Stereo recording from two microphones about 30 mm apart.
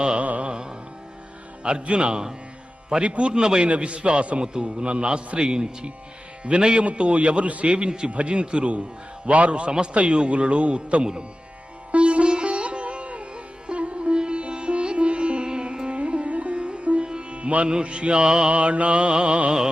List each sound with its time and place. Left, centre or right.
0.2 s music: right
0.4 s music: right
1.6 s a man's voice: right
3.4 s speech: right
3.8 s a man's voice: right
11.0 s speech: right
11.9 s music: right
16.0 s music: right
17.1 s music: right
17.8 s a man's voice: right
18.4 s a man's voice: right